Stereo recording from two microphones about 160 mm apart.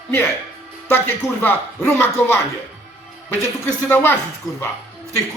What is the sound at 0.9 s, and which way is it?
Speech, 15° left (ahead or behind).